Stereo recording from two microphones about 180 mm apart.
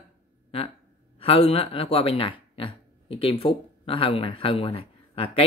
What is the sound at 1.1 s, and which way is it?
Speech, 30° left (ahead or behind).